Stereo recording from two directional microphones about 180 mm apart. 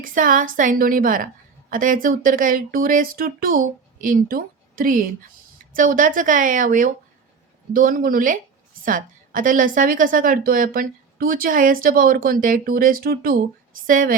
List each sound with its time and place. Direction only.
0.0 s a woman's voice: 50° right (ahead or behind)